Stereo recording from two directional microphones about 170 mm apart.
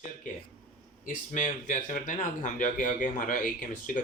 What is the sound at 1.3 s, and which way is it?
Speech, 50° left (ahead or behind).